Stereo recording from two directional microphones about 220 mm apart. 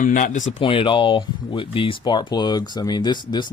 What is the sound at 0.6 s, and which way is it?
Speech, 25° left (ahead or behind).